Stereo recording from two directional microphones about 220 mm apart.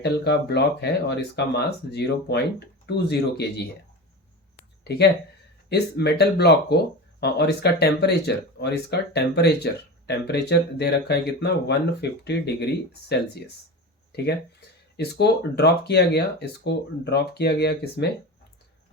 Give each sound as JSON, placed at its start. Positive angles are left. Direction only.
{"t": 0.0, "sound": "speech", "side_deg": 50}
{"t": 4.8, "sound": "speech", "side_deg": 50}
{"t": 14.1, "sound": "speech", "side_deg": 50}